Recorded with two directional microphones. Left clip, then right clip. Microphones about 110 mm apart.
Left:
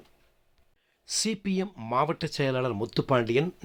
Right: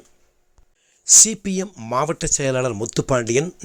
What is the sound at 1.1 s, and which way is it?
Speech, 35° right (ahead or behind).